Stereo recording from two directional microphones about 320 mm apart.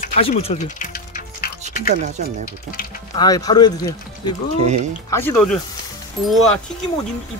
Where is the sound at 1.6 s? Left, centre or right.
Right.